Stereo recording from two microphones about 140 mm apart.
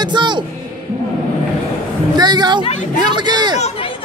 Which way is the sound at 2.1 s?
30° right (ahead or behind).